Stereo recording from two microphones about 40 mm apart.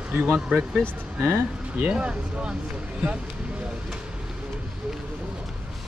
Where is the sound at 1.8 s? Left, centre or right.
Right.